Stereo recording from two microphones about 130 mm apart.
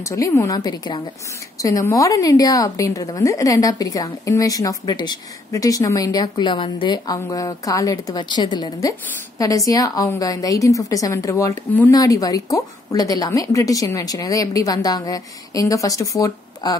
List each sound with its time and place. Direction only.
0.0 s a woman's voice: 20° left (ahead or behind)